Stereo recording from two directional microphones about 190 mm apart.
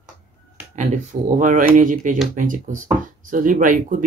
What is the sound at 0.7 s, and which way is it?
Speech, 40° right (ahead or behind).